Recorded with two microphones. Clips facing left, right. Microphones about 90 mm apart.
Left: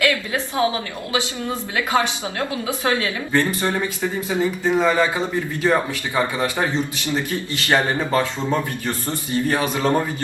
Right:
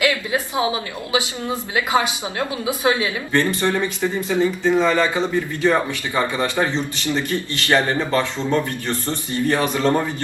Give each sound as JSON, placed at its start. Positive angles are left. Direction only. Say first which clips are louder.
{"t": 0.0, "sound": "a woman's voice", "louder": "right 1 dB", "side_deg": -20}
{"t": 3.3, "sound": "speech", "louder": "right 1 dB", "side_deg": 15}